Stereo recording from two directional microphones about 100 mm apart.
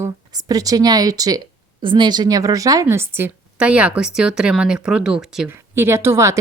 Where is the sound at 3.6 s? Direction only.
10° right (ahead or behind).